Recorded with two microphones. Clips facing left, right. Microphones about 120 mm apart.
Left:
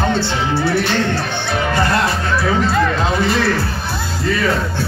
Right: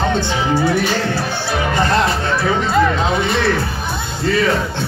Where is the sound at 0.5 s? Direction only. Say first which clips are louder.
Right 1 dB; 15° right (ahead or behind).